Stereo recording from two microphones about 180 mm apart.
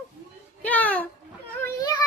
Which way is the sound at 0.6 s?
10° left (ahead or behind).